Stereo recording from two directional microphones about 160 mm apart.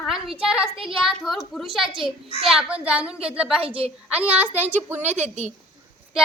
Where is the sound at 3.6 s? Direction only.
35° right (ahead or behind).